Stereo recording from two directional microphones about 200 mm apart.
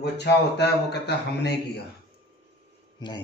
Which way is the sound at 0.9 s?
55° left (ahead or behind).